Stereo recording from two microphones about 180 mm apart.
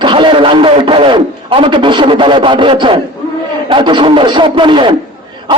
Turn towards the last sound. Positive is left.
turn(degrees=-25)  # may be behind; listen again after turning